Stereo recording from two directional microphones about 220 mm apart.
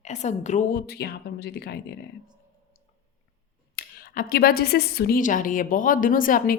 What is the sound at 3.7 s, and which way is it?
A woman's voice, 40° left (ahead or behind).